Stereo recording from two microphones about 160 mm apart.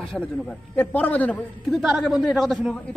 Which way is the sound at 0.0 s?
5° left (ahead or behind).